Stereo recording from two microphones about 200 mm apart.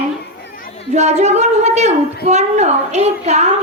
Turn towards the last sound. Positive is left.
turn(degrees=-35)  # may be behind; listen again after turning